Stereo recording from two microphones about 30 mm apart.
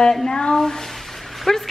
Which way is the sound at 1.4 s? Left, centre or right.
Centre.